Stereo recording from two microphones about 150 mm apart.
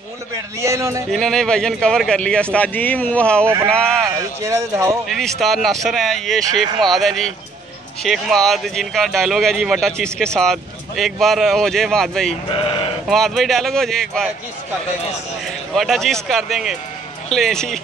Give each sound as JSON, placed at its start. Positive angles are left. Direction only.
{"t": 0.6, "sound": "speech", "side_deg": -20}
{"t": 1.1, "sound": "a man's voice", "side_deg": 5}
{"t": 4.4, "sound": "speech", "side_deg": -20}
{"t": 5.0, "sound": "speech", "side_deg": 0}
{"t": 12.4, "sound": "speech", "side_deg": 40}
{"t": 13.1, "sound": "speech", "side_deg": 0}
{"t": 15.7, "sound": "speech", "side_deg": 0}